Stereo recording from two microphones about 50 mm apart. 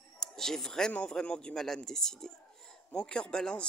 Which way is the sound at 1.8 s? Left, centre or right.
Centre.